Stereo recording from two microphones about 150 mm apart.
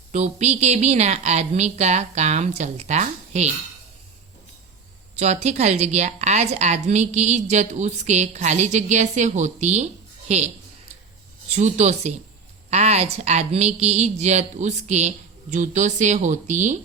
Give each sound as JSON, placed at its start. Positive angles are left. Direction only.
{"t": 0.1, "sound": "a woman's voice", "side_deg": -50}
{"t": 5.1, "sound": "a woman's voice", "side_deg": -50}